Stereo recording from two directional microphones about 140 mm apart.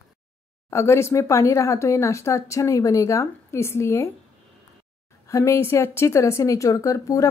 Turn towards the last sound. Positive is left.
turn(degrees=20)  # may be behind; listen again after turning